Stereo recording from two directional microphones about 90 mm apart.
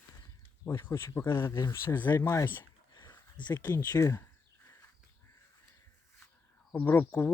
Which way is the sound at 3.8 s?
40° left (ahead or behind).